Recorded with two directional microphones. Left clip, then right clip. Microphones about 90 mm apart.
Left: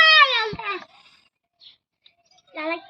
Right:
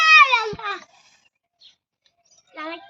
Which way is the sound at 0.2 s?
35° right (ahead or behind).